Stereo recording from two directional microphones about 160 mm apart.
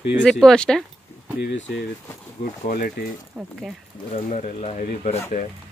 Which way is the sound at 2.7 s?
60° left (ahead or behind).